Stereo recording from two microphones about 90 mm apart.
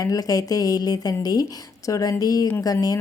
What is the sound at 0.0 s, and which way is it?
Speech, 40° left (ahead or behind).